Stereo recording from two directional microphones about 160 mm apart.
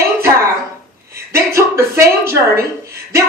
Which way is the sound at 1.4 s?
20° right (ahead or behind).